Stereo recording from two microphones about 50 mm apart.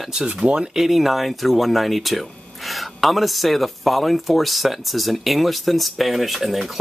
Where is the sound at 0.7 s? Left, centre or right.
Centre.